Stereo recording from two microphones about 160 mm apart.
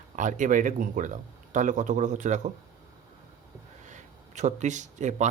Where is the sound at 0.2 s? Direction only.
50° right (ahead or behind).